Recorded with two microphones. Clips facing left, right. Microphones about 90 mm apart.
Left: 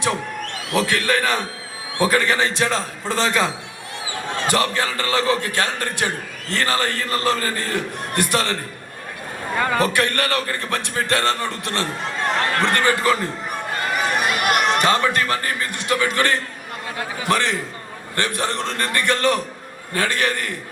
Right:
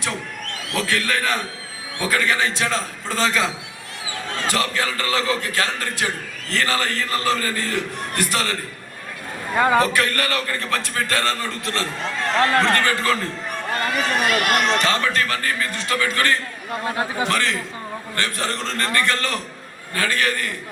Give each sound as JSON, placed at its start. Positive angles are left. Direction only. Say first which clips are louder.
{"t": 0.7, "sound": "a man's voice", "louder": "left 3 dB", "side_deg": 25}
{"t": 4.4, "sound": "a man's voice", "louder": "left 2 dB", "side_deg": 25}
{"t": 9.6, "sound": "a man's voice", "louder": "right 4 dB", "side_deg": -15}
{"t": 9.9, "sound": "a man's voice", "louder": "left 1 dB", "side_deg": 30}